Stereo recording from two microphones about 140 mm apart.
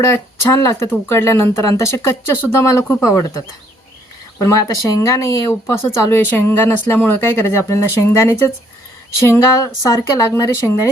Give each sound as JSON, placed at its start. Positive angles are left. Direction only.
{"t": 0.1, "sound": "speech", "side_deg": 20}
{"t": 4.4, "sound": "speech", "side_deg": 20}